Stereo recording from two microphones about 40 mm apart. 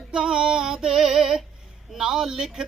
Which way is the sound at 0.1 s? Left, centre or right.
Right.